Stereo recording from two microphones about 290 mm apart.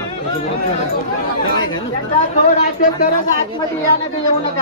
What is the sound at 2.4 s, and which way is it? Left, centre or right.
Speech, left.